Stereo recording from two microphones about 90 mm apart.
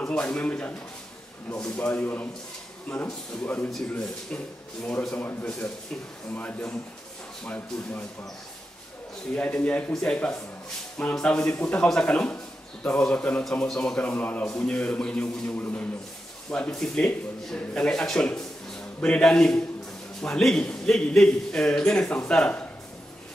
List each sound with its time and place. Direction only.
0.0 s speech: 10° left (ahead or behind)
1.8 s a man's voice: 15° left (ahead or behind)
3.4 s a man's voice: 15° left (ahead or behind)
5.2 s a man's voice: 15° left (ahead or behind)
9.3 s a man's voice: 15° left (ahead or behind)